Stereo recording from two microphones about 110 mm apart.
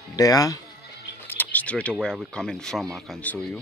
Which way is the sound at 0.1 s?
35° left (ahead or behind).